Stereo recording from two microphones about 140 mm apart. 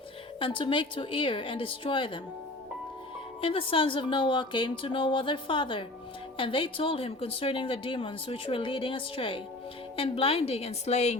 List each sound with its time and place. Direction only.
0.3 s speech: 35° left (ahead or behind)
3.4 s a woman's voice: 40° left (ahead or behind)